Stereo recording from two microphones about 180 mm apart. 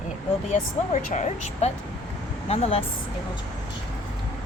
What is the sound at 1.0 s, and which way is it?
Speech, 40° left (ahead or behind).